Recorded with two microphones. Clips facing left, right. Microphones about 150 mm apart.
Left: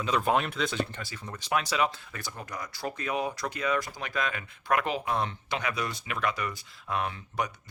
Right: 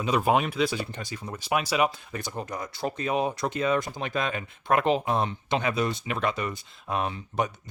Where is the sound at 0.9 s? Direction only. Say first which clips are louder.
Right 4 dB; 15° right (ahead or behind).